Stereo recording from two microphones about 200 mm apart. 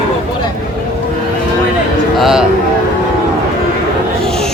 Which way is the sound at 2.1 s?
Centre (ahead or behind).